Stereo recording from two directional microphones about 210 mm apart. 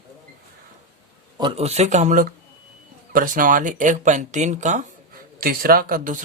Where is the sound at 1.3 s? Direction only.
25° right (ahead or behind).